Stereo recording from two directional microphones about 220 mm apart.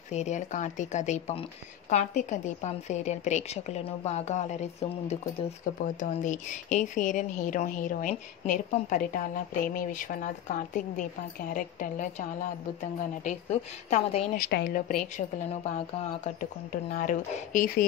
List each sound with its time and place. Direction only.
0.1 s speech: 30° left (ahead or behind)
14.4 s speech: 45° left (ahead or behind)